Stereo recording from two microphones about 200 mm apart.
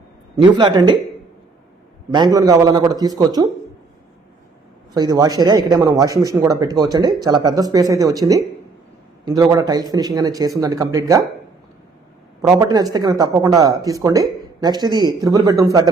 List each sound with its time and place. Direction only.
0.5 s speech: 20° right (ahead or behind)
2.1 s speech: 20° right (ahead or behind)
4.9 s speech: 20° right (ahead or behind)
12.4 s speech: 15° right (ahead or behind)